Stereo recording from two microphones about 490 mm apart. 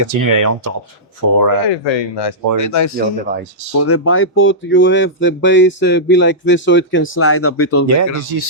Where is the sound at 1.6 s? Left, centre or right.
Left.